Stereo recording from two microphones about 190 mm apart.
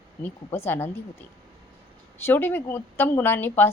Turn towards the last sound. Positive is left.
turn(degrees=10)  # may be behind; listen again after turning